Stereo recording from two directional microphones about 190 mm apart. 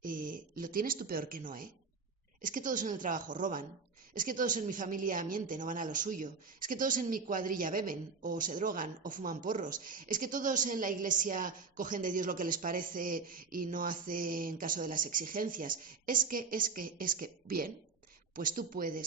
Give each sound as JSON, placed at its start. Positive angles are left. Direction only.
{"t": 0.0, "sound": "a woman's voice", "side_deg": -45}